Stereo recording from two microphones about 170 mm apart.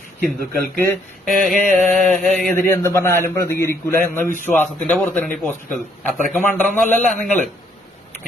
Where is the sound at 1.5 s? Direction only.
50° right (ahead or behind).